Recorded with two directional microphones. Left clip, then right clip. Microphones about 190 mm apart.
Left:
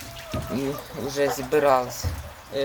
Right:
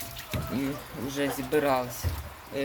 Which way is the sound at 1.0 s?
10° right (ahead or behind).